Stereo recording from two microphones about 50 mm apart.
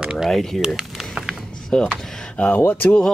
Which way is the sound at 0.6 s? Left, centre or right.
Centre.